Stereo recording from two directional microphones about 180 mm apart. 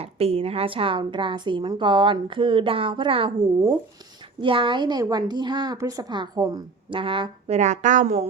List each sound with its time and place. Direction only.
0.0 s a woman's voice: 35° right (ahead or behind)